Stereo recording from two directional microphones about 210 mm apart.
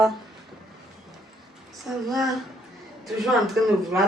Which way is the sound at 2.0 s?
Centre (ahead or behind).